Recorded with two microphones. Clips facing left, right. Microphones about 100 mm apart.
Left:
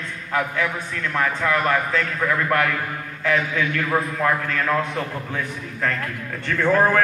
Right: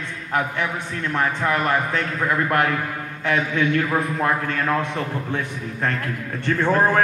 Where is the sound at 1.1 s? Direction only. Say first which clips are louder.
Even; 25° right (ahead or behind).